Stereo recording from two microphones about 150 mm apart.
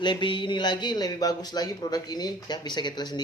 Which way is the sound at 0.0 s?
30° left (ahead or behind).